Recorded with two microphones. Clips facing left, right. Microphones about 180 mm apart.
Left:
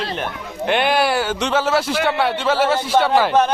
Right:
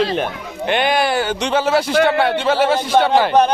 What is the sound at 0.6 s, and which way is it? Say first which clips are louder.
A man's voice: even; centre (ahead or behind).